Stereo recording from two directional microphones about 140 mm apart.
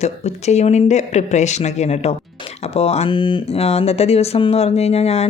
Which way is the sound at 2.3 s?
45° left (ahead or behind).